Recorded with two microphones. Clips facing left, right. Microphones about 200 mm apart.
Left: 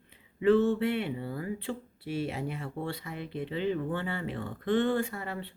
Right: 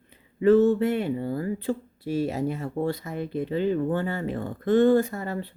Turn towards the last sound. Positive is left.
turn(degrees=-40)  # may be behind; listen again after turning